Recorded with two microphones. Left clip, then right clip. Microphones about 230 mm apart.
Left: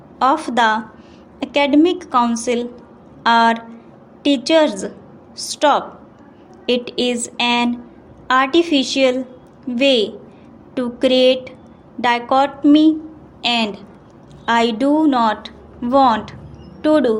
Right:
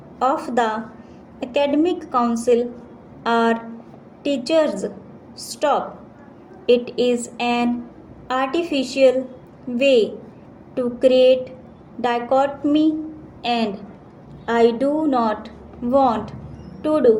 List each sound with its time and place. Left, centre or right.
0.2 s a woman's voice: left